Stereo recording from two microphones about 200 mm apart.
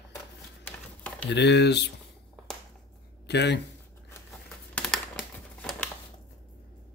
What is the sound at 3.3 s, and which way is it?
Speech, 60° left (ahead or behind).